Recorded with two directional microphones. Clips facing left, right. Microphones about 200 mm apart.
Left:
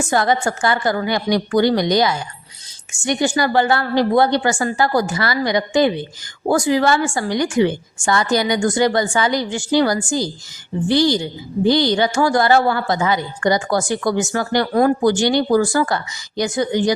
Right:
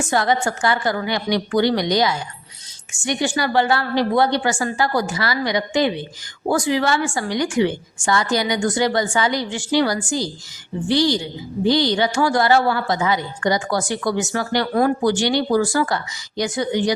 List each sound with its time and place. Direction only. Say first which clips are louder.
0.1 s a woman's voice: left 1 dB; 45° left (ahead or behind)
11.6 s a woman's voice: left 2 dB; 45° left (ahead or behind)